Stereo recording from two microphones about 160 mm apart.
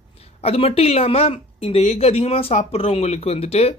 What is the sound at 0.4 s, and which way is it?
A man's voice, 40° left (ahead or behind).